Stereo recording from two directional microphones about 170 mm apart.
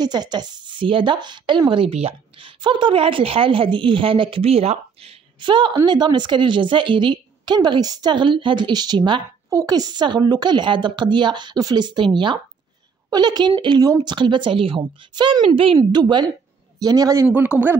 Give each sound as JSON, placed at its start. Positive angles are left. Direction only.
{"t": 0.0, "sound": "speech", "side_deg": -25}